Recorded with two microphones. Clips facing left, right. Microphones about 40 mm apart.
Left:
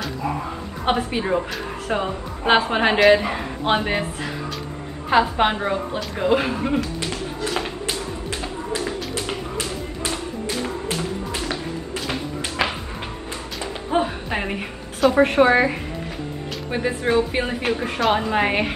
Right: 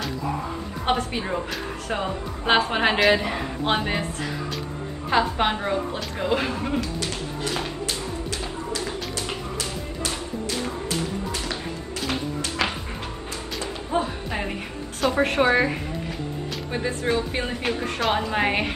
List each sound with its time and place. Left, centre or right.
0.8 s a woman's voice: centre
5.1 s a woman's voice: centre
7.0 s bird: left
9.1 s music: left
10.9 s a sound: left
13.8 s music: left
15.0 s a woman's voice: centre